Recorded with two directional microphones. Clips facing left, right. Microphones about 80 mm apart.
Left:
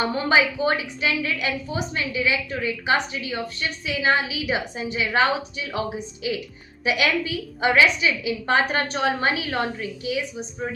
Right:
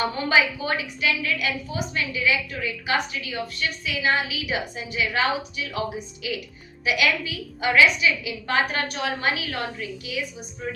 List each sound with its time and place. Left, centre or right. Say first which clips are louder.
0.0 s a woman's voice: left 1 dB; left